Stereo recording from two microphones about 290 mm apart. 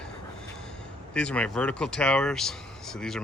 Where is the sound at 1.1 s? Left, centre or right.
Centre.